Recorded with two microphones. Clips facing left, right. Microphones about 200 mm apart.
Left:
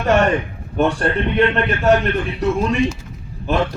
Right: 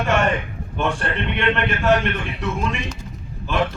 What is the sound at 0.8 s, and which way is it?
Music, 35° left (ahead or behind).